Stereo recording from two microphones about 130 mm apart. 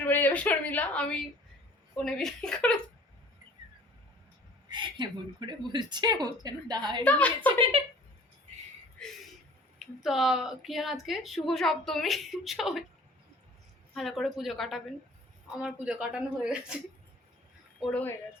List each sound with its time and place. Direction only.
0.0 s a woman's voice: 15° left (ahead or behind)
4.7 s speech: 35° right (ahead or behind)
7.0 s a woman's voice: 10° left (ahead or behind)
7.6 s speech: 45° right (ahead or behind)
9.0 s a sound: 5° left (ahead or behind)
9.7 s speech: centre (ahead or behind)
13.9 s a woman's voice: centre (ahead or behind)
17.7 s speech: 5° left (ahead or behind)